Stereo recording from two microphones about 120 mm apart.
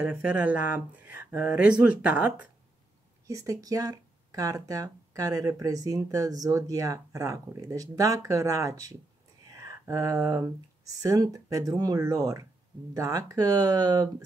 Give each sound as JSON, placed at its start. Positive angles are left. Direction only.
{"t": 0.0, "sound": "speech", "side_deg": -10}
{"t": 3.3, "sound": "speech", "side_deg": -30}
{"t": 9.5, "sound": "a sound", "side_deg": -25}
{"t": 11.0, "sound": "speech", "side_deg": -30}